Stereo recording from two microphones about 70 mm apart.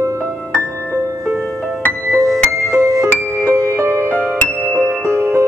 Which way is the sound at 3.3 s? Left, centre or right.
Right.